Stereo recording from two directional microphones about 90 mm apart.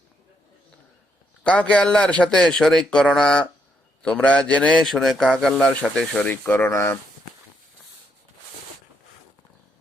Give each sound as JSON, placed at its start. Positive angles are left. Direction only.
{"t": 1.5, "sound": "a man's voice", "side_deg": 15}
{"t": 6.2, "sound": "speech", "side_deg": 20}